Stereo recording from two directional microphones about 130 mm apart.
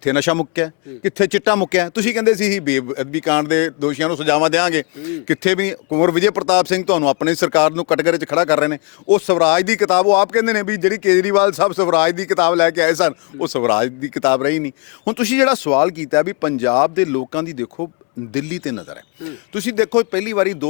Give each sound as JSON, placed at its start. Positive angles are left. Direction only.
{"t": 0.0, "sound": "speech", "side_deg": 20}